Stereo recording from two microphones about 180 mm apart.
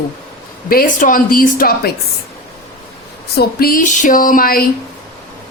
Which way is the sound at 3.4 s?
55° left (ahead or behind).